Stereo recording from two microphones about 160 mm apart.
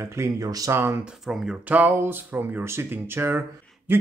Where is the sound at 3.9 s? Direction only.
10° right (ahead or behind).